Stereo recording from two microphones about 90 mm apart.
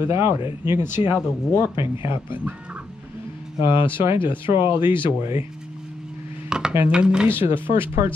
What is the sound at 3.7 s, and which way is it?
Speech, 70° left (ahead or behind).